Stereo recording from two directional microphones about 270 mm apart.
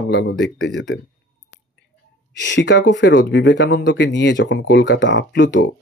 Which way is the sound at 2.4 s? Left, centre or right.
Left.